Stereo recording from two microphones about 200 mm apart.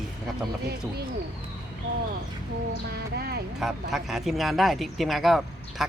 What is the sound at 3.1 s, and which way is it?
Speech, 50° right (ahead or behind).